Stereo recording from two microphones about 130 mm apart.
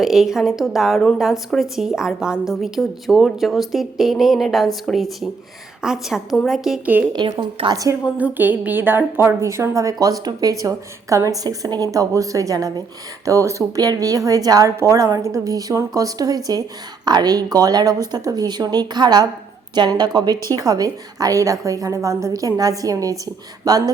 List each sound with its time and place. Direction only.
0.0 s a woman's voice: 5° right (ahead or behind)
7.1 s speech: 35° right (ahead or behind)
8.2 s a woman's voice: 15° right (ahead or behind); by 23.9 s 30° right (ahead or behind)